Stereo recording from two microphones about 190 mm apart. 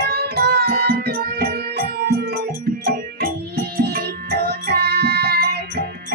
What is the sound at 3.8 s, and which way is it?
Music, 55° right (ahead or behind).